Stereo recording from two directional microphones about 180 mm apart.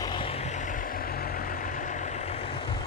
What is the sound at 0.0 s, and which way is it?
Vehicle, 25° left (ahead or behind).